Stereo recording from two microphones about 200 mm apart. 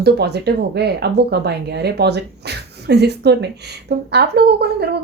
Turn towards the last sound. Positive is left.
turn(degrees=-55)  # may be behind; listen again after turning